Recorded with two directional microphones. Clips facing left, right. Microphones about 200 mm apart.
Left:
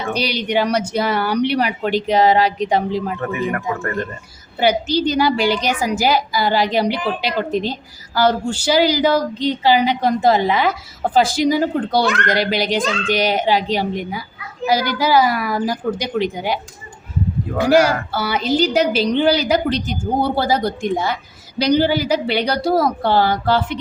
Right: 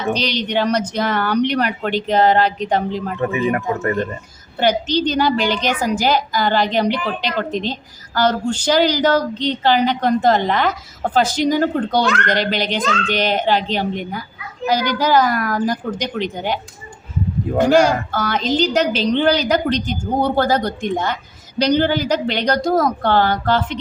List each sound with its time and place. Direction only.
0.1 s a woman's voice: 10° left (ahead or behind)
3.2 s speech: 20° right (ahead or behind)
4.6 s a woman's voice: 10° left (ahead or behind)
17.6 s a woman's voice: 10° left (ahead or behind)